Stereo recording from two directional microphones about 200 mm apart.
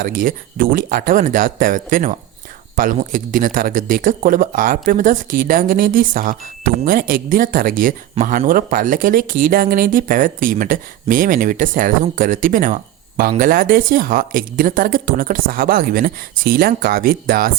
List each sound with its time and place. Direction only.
0.0 s speech: 45° right (ahead or behind)